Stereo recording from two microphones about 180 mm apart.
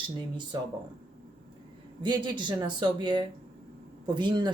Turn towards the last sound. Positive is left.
turn(degrees=-25)  # may be behind; listen again after turning